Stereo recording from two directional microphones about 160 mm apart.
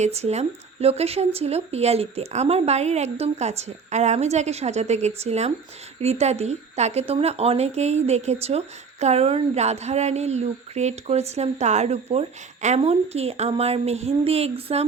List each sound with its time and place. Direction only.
0.0 s speech: 45° right (ahead or behind)